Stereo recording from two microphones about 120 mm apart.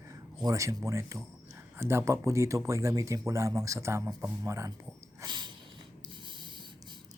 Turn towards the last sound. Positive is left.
turn(degrees=-40)  # may be behind; listen again after turning